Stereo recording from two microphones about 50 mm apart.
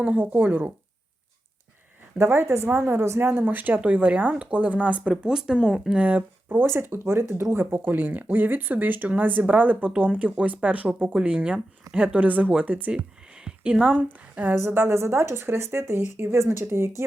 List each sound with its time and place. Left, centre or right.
0.0 s speech: right
2.1 s speech: right
3.2 s speech: right
5.2 s speech: centre
5.9 s speech: right
6.7 s speech: right
7.9 s speech: right
13.4 s a sound: centre
14.5 s speech: right